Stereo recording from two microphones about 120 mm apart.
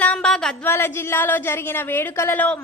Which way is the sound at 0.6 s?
20° left (ahead or behind).